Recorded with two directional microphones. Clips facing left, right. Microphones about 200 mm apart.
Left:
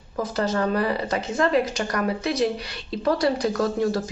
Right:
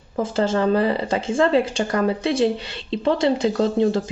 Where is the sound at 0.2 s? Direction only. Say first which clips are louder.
Right 4 dB; 25° right (ahead or behind).